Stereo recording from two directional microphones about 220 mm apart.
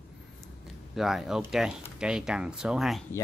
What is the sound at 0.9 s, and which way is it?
Speech, centre (ahead or behind).